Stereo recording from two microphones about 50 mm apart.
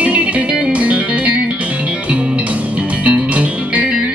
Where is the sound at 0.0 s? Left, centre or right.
Right.